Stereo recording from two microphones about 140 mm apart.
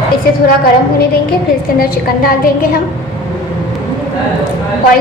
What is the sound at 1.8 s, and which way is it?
A woman's voice, 90° left.